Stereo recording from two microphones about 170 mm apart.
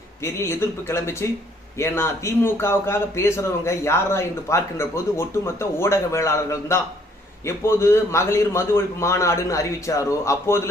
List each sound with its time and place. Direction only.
0.2 s a man's voice: 15° left (ahead or behind)